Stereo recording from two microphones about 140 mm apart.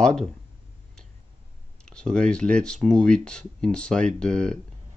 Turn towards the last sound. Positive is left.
turn(degrees=5)  # may be behind; listen again after turning